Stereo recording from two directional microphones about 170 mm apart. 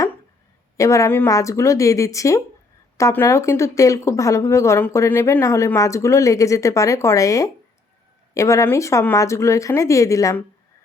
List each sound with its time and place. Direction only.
0.8 s a woman's voice: 20° left (ahead or behind)